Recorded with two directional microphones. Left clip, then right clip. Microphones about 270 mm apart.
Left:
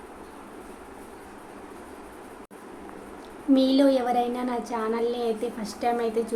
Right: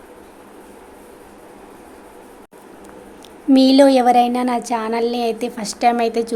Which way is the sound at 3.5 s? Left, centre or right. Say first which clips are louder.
Right 9 dB; right.